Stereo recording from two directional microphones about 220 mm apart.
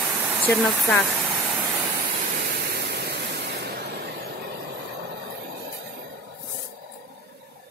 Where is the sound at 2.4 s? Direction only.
45° right (ahead or behind).